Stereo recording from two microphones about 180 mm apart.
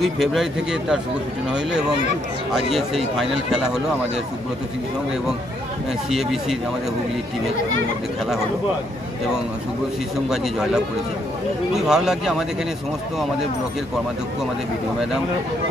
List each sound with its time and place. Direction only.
0.0 s speech: centre (ahead or behind)
2.5 s speech: centre (ahead or behind)
10.3 s speech: centre (ahead or behind)